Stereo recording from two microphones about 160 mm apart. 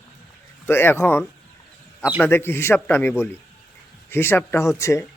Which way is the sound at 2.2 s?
15° left (ahead or behind).